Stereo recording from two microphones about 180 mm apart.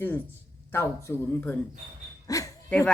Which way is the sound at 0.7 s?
15° left (ahead or behind).